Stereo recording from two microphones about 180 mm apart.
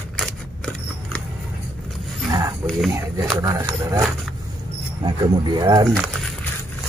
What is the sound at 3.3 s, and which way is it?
Speech, 25° right (ahead or behind).